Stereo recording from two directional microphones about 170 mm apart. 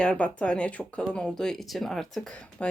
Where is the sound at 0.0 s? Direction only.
5° left (ahead or behind).